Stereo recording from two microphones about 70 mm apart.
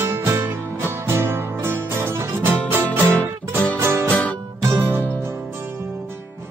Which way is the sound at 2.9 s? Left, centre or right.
Left.